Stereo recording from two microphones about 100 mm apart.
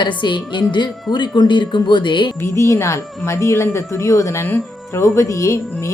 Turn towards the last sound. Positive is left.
turn(degrees=30)  # may be behind; listen again after turning